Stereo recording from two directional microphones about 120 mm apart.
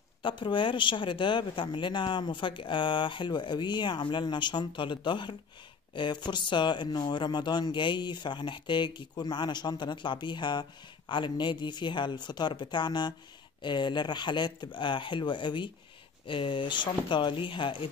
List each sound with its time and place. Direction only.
0.2 s speech: 40° left (ahead or behind)